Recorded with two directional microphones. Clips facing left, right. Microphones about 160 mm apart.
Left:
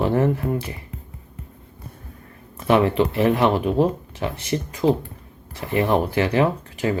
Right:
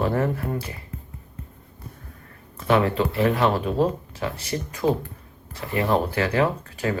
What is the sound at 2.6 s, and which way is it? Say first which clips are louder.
Speech: left 3 dB; 20° left (ahead or behind).